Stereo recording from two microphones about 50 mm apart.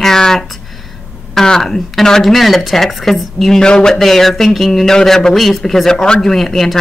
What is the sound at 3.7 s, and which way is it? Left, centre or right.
Speech, centre.